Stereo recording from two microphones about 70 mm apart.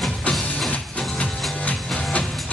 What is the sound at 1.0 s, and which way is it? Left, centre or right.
Music, centre.